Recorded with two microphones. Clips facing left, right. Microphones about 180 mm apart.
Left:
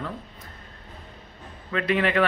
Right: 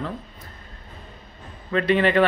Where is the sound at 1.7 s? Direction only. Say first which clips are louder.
Right 4 dB; centre (ahead or behind).